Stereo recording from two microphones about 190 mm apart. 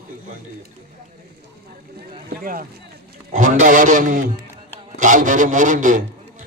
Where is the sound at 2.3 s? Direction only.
50° right (ahead or behind).